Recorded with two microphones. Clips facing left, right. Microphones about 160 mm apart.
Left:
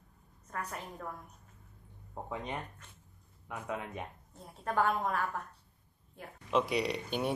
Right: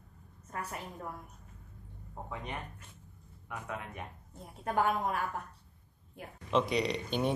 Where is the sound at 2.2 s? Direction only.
20° left (ahead or behind).